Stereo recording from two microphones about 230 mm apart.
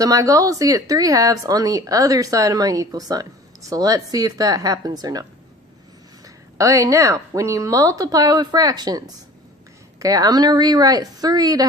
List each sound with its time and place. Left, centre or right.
0.0 s speech: centre
6.2 s speech: centre